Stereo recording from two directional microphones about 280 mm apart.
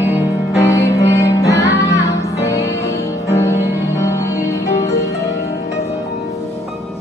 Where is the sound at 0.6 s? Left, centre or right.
Centre.